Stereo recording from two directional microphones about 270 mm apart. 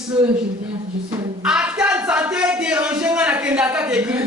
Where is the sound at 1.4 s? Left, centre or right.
Centre.